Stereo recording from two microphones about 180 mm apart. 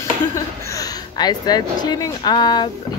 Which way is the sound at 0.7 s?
20° left (ahead or behind).